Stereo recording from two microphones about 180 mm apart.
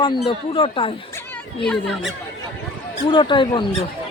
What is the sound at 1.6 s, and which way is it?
Speech, centre (ahead or behind).